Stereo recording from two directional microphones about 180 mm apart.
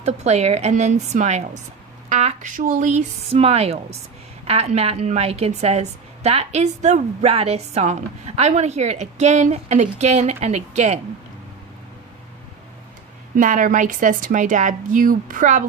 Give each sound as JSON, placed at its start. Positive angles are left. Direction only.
{"t": 0.0, "sound": "a woman's voice", "side_deg": -35}
{"t": 13.3, "sound": "a woman's voice", "side_deg": -45}